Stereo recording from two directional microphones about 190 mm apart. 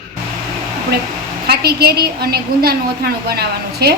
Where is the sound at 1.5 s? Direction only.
55° right (ahead or behind).